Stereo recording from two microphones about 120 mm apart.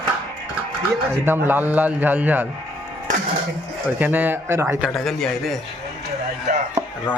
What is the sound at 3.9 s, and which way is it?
Speech, 15° right (ahead or behind).